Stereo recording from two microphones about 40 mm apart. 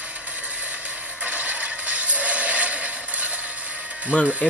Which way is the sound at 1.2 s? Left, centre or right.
Right.